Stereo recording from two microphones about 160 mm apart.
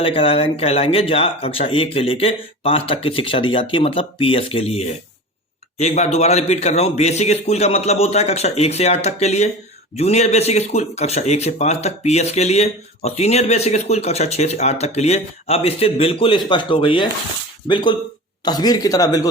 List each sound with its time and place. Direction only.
0.0 s speech: 35° left (ahead or behind)